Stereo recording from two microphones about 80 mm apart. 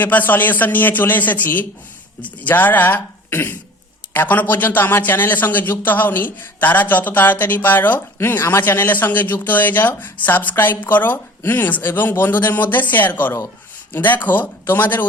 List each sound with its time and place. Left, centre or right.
0.0 s a man's voice: left